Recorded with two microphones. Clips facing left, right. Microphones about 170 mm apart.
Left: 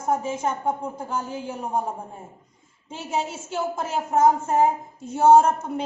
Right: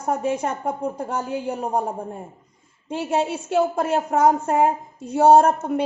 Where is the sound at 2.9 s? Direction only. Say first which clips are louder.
Right 6 dB; 65° right (ahead or behind).